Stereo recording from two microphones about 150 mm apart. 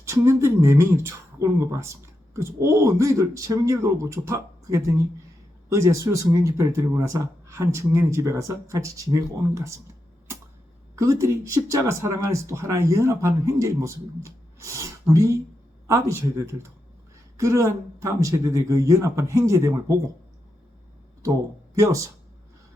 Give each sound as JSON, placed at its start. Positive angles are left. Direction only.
{"t": 0.0, "sound": "speech", "side_deg": -20}
{"t": 10.9, "sound": "speech", "side_deg": -20}